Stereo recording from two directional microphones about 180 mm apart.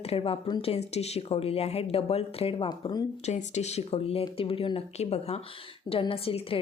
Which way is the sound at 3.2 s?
40° left (ahead or behind).